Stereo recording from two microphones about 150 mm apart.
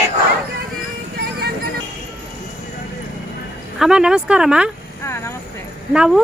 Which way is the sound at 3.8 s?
5° right (ahead or behind).